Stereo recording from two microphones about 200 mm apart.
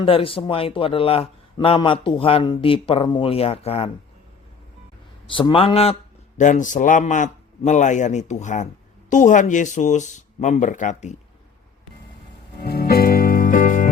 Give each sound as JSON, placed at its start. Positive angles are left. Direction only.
{"t": 0.0, "sound": "a man's voice", "side_deg": 25}
{"t": 5.3, "sound": "speech", "side_deg": 25}
{"t": 12.6, "sound": "music", "side_deg": 50}